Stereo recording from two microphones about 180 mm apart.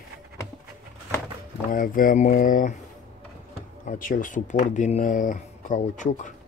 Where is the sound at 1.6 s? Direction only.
50° left (ahead or behind).